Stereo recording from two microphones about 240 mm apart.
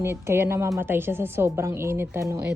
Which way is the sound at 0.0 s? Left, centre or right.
Centre.